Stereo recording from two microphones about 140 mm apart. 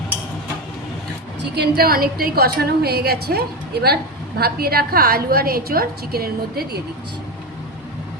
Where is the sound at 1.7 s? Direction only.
90° right.